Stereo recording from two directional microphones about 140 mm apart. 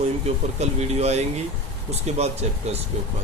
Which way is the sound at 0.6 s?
50° right (ahead or behind).